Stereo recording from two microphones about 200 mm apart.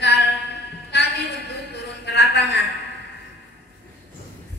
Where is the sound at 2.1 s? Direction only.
60° left (ahead or behind).